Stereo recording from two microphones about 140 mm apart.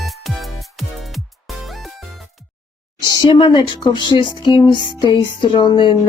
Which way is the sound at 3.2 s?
35° left (ahead or behind).